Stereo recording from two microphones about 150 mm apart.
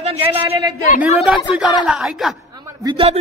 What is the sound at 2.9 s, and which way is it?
Speech, 40° right (ahead or behind).